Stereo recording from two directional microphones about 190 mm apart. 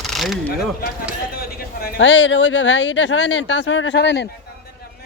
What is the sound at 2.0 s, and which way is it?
Speech, 70° left (ahead or behind).